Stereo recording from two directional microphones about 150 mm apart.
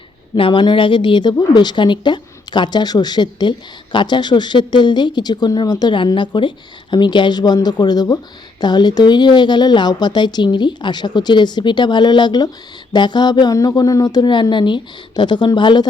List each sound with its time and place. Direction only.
0.3 s a woman's voice: 35° left (ahead or behind)